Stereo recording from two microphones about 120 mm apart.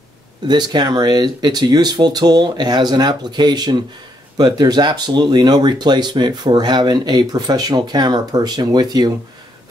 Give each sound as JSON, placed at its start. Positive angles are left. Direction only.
{"t": 0.5, "sound": "speech", "side_deg": -40}